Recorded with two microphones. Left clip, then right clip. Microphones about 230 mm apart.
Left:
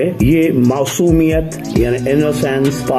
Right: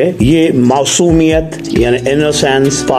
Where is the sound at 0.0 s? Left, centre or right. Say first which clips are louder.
Right 3 dB; centre.